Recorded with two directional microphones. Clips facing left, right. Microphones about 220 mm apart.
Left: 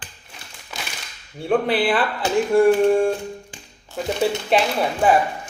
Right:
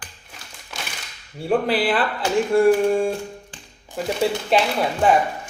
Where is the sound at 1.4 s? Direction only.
Centre (ahead or behind).